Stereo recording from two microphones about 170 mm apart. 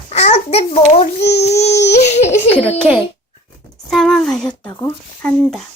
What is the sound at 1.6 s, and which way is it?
Baby cry, 40° left (ahead or behind).